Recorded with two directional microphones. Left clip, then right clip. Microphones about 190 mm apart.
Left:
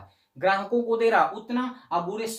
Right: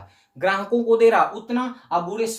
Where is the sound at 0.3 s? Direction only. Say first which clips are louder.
Right 2 dB; 30° right (ahead or behind).